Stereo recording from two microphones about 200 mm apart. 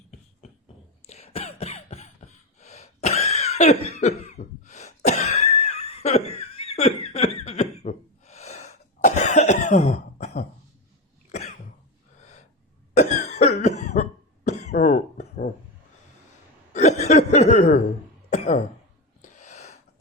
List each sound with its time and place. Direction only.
1.0 s cough: 30° left (ahead or behind)
12.9 s cough: 35° left (ahead or behind)
14.8 s a sound: 40° left (ahead or behind)
16.7 s chuckle: 35° left (ahead or behind)
18.3 s cough: 35° left (ahead or behind)
19.2 s gasp: 35° left (ahead or behind)